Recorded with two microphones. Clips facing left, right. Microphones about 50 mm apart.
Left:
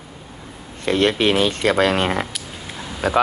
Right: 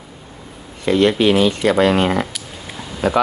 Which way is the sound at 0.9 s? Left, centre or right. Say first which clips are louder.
Right 3 dB; left.